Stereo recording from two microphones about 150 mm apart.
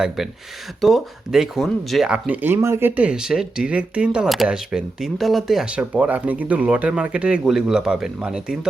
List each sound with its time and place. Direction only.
0.8 s speech: centre (ahead or behind)